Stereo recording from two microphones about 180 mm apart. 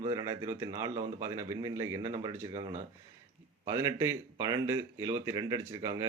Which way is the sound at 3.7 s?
15° right (ahead or behind).